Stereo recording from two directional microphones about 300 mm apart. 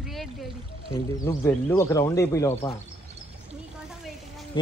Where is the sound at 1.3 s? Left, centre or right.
Centre.